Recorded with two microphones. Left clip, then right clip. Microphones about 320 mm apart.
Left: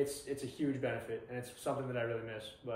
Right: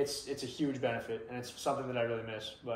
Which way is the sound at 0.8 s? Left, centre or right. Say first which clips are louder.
Right 3 dB; centre.